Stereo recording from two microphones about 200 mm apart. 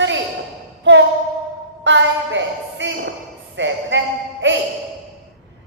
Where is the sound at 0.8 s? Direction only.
65° right (ahead or behind).